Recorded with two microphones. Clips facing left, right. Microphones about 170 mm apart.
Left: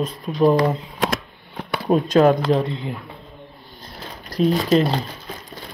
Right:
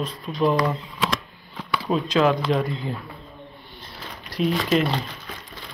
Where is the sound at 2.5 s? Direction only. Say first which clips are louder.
Left 3 dB; 25° left (ahead or behind).